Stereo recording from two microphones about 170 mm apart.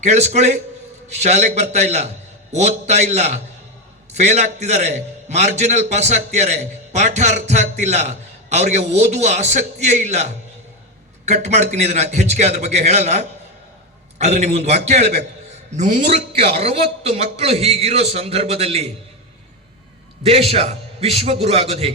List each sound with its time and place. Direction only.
0.0 s a man's voice: 40° right (ahead or behind)
16.6 s a man's voice: 35° right (ahead or behind)
20.2 s a man's voice: 35° right (ahead or behind)